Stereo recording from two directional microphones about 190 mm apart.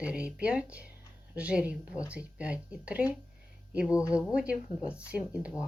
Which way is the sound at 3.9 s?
15° left (ahead or behind).